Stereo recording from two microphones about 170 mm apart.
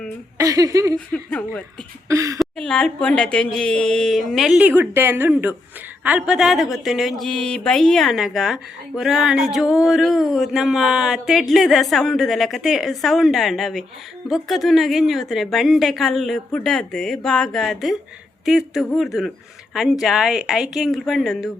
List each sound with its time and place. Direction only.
0.3 s speech: 20° right (ahead or behind)
0.9 s speech: 5° left (ahead or behind)
2.0 s speech: 20° right (ahead or behind)
2.4 s speech: 5° left (ahead or behind)